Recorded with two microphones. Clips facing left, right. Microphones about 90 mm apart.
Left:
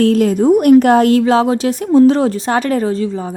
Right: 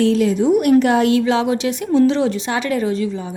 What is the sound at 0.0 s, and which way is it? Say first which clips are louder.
A woman's voice: left 4 dB; 50° left (ahead or behind).